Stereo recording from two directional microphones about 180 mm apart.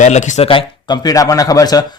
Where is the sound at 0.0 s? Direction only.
40° left (ahead or behind).